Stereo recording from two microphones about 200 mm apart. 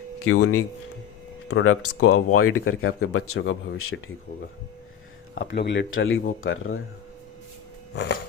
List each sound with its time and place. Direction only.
0.3 s speech: 90° left
1.5 s speech: 90° left
5.3 s speech: 70° left (ahead or behind)
6.4 s speech: 90° left
7.9 s music: 55° left (ahead or behind)